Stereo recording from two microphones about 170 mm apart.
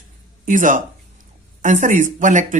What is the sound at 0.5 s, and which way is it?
Speech, 50° right (ahead or behind).